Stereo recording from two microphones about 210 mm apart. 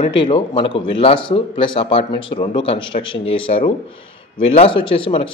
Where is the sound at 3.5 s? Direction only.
40° left (ahead or behind).